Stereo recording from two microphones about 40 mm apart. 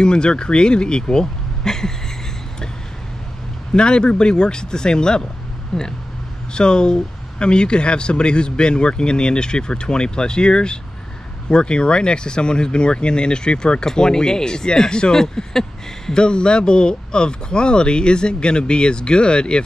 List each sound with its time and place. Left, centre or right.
0.0 s speech: left
3.7 s speech: left
5.7 s speech: centre
6.5 s speech: left